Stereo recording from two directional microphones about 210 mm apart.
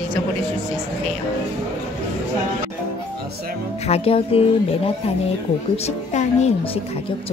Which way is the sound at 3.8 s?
30° left (ahead or behind).